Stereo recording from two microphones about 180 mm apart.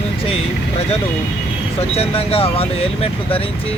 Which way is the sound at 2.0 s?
30° left (ahead or behind).